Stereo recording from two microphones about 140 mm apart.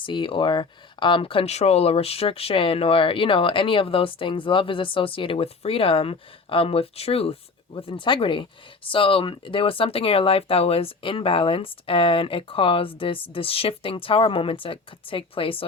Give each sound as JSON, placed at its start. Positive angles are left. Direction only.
{"t": 0.0, "sound": "speech", "side_deg": 35}